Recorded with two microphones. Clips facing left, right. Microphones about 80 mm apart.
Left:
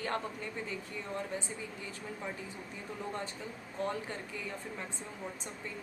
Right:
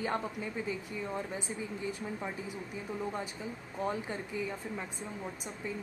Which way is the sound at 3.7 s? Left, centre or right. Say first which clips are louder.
Right 1 dB; centre.